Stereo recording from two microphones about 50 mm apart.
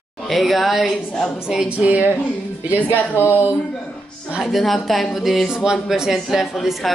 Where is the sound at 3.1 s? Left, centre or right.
Left.